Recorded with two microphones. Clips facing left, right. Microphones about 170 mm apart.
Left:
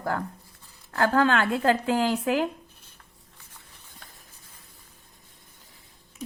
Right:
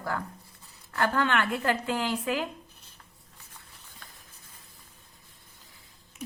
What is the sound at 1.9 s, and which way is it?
Speech, 65° left (ahead or behind).